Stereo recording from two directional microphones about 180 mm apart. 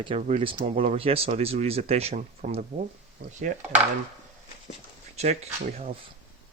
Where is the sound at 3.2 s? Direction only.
60° right (ahead or behind).